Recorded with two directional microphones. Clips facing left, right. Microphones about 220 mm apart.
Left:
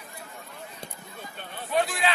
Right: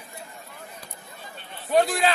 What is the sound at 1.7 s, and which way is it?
Speech, 40° right (ahead or behind).